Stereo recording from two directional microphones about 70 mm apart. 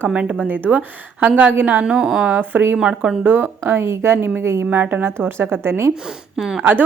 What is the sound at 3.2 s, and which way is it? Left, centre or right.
A woman's voice, right.